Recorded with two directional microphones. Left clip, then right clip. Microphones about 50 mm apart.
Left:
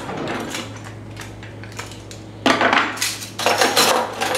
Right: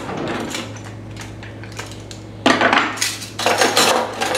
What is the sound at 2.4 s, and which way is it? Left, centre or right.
Dishes, centre.